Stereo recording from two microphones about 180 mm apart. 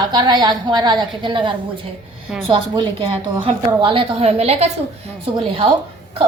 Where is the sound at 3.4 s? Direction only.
30° right (ahead or behind).